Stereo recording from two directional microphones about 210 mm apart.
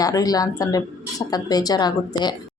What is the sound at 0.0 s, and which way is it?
A woman's voice, 15° left (ahead or behind).